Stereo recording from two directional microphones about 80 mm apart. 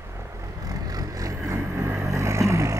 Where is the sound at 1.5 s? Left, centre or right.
Right.